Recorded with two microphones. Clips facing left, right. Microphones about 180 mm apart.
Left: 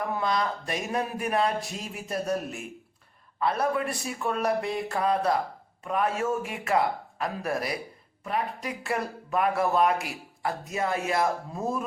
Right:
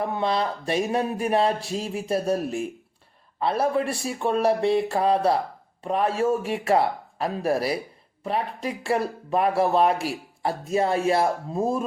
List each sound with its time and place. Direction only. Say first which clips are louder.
0.0 s speech: right 3 dB; 30° right (ahead or behind)